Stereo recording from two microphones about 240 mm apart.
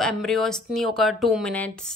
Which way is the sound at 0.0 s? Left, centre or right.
Centre.